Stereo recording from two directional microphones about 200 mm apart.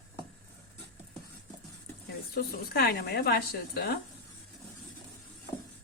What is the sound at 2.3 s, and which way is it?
Speech, 50° left (ahead or behind).